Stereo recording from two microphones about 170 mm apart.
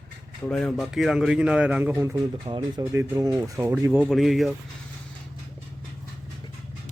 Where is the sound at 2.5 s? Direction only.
25° right (ahead or behind); by 4.5 s centre (ahead or behind).